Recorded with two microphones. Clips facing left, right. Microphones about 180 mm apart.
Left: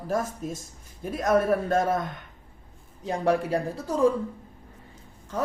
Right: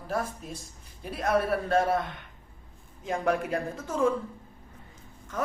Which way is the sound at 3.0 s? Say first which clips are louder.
Left 3 dB; 35° left (ahead or behind).